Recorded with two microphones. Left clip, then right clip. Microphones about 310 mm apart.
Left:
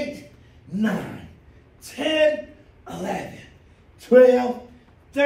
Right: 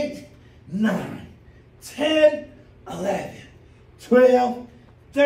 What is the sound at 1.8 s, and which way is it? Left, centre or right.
A man's voice, centre.